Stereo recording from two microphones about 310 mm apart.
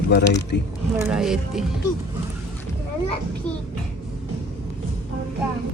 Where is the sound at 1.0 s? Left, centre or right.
Centre.